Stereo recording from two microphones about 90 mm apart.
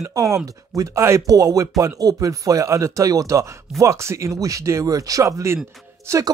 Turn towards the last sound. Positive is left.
turn(degrees=-30)  # may be behind; listen again after turning